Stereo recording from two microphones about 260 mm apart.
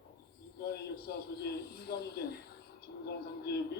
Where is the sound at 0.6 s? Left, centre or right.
Left.